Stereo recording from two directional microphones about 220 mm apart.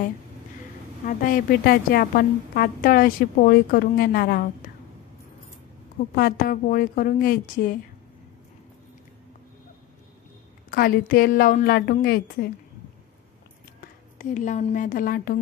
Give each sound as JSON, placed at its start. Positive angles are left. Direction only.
{"t": 1.0, "sound": "a woman's voice", "side_deg": 40}
{"t": 6.1, "sound": "a woman's voice", "side_deg": 40}
{"t": 10.7, "sound": "a woman's voice", "side_deg": 40}
{"t": 14.1, "sound": "a woman's voice", "side_deg": 35}